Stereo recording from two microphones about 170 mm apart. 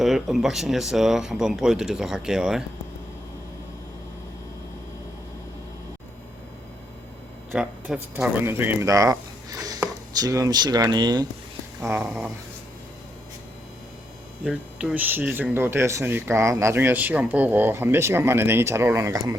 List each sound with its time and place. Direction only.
0.0 s speech: centre (ahead or behind)
7.5 s speech: 5° right (ahead or behind)
14.4 s speech: 5° right (ahead or behind); by 19.4 s 20° right (ahead or behind)